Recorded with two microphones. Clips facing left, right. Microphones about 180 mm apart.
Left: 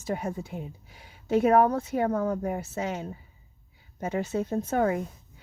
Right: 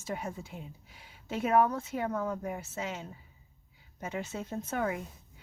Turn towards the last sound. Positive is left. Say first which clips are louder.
# left 8 dB
turn(degrees=40)  # may be behind; listen again after turning